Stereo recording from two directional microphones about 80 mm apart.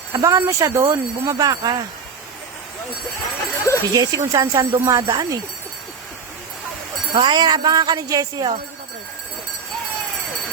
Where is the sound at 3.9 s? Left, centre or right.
Right.